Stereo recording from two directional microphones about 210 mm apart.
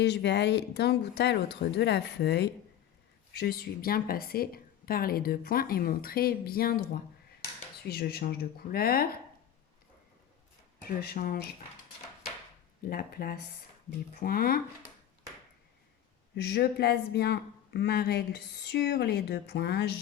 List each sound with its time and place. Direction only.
0.0 s speech: 55° left (ahead or behind)
10.8 s speech: 45° left (ahead or behind)
12.9 s speech: 45° left (ahead or behind)
16.3 s speech: 50° left (ahead or behind)